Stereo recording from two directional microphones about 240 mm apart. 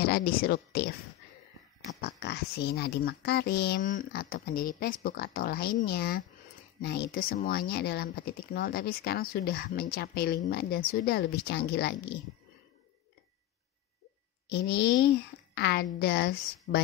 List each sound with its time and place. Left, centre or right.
0.0 s speech: left
2.0 s speech: left
14.5 s a woman's voice: left